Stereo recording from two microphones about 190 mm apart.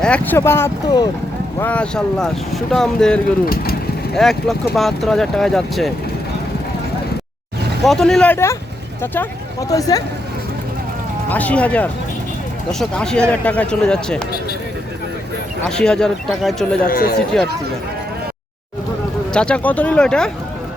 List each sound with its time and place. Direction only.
0.0 s speech: 10° left (ahead or behind)
1.5 s speech: 10° left (ahead or behind)
3.4 s speech: 50° left (ahead or behind)
4.1 s speech: centre (ahead or behind)
7.9 s speech: centre (ahead or behind); by 10.0 s 20° left (ahead or behind)
11.3 s speech: 10° left (ahead or behind)
15.6 s speech: 5° left (ahead or behind)
16.8 s speech: 50° left (ahead or behind)
19.3 s speech: 5° left (ahead or behind)